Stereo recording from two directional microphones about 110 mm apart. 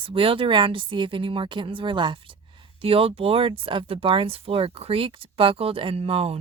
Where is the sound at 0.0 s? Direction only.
55° right (ahead or behind).